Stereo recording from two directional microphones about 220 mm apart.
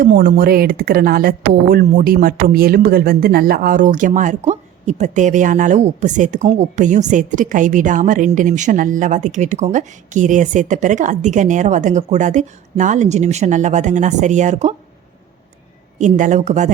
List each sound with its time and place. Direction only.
0.0 s speech: 40° right (ahead or behind)
16.0 s speech: 35° right (ahead or behind)